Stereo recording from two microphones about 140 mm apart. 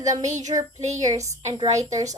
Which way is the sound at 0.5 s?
40° right (ahead or behind).